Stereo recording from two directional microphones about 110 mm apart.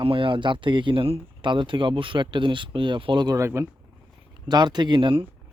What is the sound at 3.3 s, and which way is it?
Speech, 25° right (ahead or behind).